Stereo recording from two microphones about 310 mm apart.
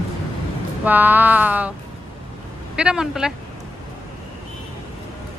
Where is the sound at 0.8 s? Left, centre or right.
Centre.